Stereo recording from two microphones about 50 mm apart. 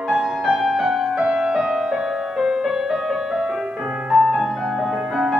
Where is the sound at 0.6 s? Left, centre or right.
Centre.